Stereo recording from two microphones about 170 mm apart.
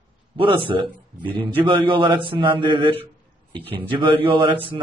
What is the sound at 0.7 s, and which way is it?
A man's voice, 30° right (ahead or behind).